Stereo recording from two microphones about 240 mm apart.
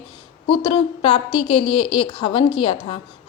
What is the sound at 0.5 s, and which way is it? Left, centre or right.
A woman's voice, left.